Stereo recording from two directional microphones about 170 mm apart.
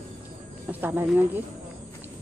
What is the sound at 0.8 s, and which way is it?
Speech, 10° right (ahead or behind).